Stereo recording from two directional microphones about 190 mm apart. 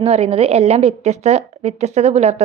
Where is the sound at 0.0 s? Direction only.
30° right (ahead or behind).